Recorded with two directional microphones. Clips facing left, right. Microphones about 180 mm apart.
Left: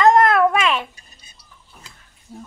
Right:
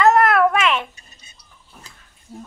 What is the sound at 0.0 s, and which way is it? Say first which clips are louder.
Babbling: left 1 dB; 20° left (ahead or behind).